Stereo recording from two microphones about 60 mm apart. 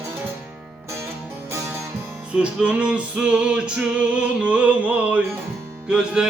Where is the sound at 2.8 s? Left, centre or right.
Centre.